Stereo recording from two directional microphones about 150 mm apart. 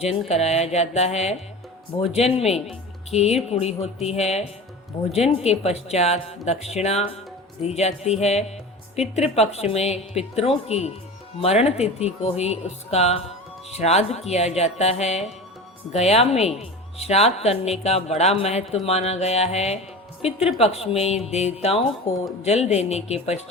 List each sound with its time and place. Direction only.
0.0 s a woman's voice: 45° left (ahead or behind)